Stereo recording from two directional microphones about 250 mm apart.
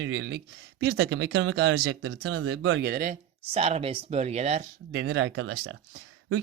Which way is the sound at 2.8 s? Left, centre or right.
Right.